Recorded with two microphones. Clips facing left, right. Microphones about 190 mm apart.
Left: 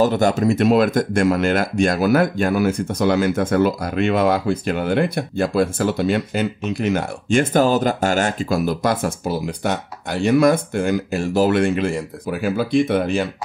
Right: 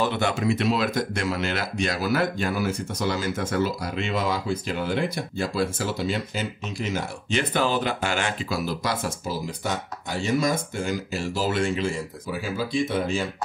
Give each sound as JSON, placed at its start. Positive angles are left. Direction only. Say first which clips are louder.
{"t": 0.0, "sound": "speech", "louder": "left 8 dB", "side_deg": 40}